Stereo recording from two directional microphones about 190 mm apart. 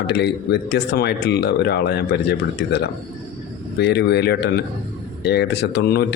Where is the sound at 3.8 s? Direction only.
60° left (ahead or behind).